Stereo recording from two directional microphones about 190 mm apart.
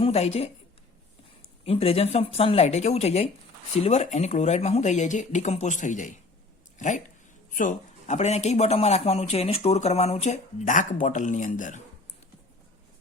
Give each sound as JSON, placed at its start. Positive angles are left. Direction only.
{"t": 0.0, "sound": "a man's voice", "side_deg": 30}
{"t": 1.6, "sound": "a man's voice", "side_deg": 30}